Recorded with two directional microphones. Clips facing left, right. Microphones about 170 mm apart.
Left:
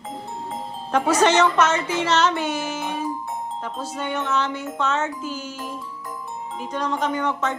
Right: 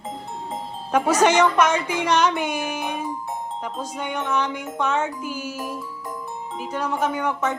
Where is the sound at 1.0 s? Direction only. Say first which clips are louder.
Even; 10° right (ahead or behind).